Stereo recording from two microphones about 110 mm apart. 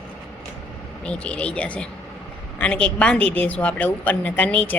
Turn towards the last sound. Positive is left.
turn(degrees=10)  # may be behind; listen again after turning